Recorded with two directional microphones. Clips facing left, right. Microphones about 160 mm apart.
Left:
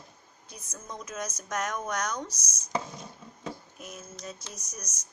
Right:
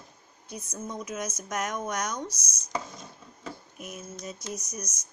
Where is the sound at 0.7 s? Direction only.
10° right (ahead or behind).